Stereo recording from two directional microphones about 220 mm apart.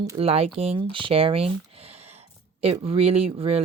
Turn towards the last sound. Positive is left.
turn(degrees=-25)  # may be behind; listen again after turning